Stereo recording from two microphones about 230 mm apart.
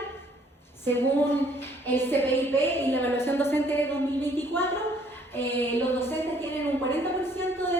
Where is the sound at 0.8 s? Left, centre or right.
Centre.